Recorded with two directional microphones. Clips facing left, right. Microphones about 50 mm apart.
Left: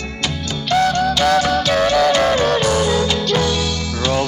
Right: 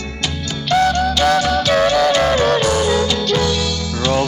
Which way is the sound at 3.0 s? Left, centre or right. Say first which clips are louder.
Even; left.